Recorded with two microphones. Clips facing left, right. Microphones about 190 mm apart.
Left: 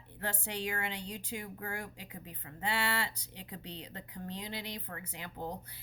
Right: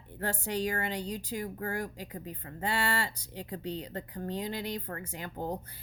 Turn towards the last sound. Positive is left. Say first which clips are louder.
# right 5 dB
turn(degrees=-45)  # may be behind; listen again after turning